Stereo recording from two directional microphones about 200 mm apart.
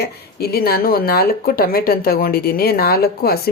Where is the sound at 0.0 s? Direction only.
50° left (ahead or behind).